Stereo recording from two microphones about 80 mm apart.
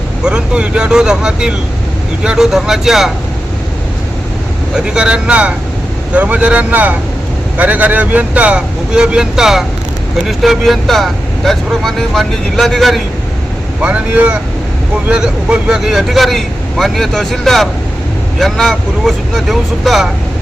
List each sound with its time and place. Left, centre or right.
0.2 s speech: centre
4.7 s speech: centre
13.8 s speech: centre